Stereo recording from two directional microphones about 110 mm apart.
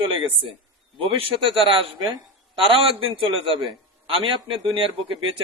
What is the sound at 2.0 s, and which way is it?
Speech, 40° right (ahead or behind).